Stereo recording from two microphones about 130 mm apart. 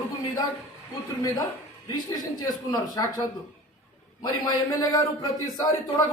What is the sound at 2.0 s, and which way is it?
Speech, 25° left (ahead or behind).